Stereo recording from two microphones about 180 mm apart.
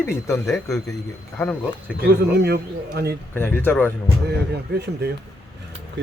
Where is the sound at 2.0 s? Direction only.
65° right (ahead or behind).